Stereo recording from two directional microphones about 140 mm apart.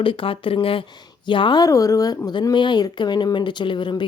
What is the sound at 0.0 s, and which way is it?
Speech, 40° left (ahead or behind).